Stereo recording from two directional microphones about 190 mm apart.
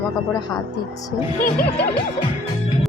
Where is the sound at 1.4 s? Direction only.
45° left (ahead or behind).